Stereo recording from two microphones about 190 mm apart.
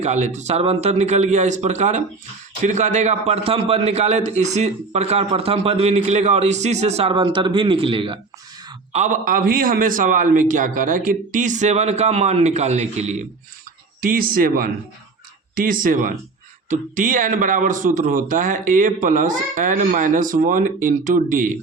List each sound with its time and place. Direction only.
0.0 s a man's voice: 35° right (ahead or behind)
8.9 s a man's voice: 40° right (ahead or behind)
14.0 s a man's voice: 50° right (ahead or behind)